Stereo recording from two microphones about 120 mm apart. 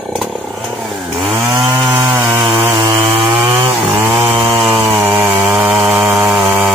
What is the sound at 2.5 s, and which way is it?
Chainsaw, 45° right (ahead or behind).